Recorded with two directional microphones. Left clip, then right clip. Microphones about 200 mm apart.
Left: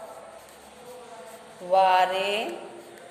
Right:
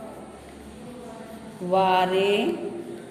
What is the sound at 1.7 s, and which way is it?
Speech, 25° left (ahead or behind).